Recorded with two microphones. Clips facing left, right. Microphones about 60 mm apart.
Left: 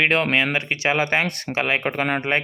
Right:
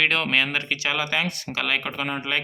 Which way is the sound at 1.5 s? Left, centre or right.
Left.